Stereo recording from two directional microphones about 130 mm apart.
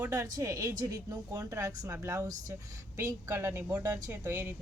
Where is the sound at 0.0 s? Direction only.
25° right (ahead or behind).